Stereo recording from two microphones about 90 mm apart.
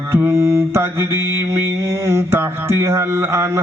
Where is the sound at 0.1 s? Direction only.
30° right (ahead or behind).